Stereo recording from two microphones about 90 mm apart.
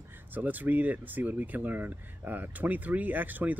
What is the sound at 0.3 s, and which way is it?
A man's voice, 20° right (ahead or behind).